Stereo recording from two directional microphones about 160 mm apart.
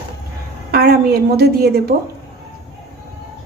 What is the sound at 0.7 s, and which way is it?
A woman's voice, 75° right (ahead or behind).